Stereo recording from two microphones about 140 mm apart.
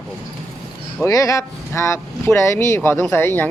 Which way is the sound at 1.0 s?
25° left (ahead or behind).